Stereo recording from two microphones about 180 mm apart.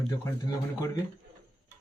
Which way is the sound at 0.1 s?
20° left (ahead or behind).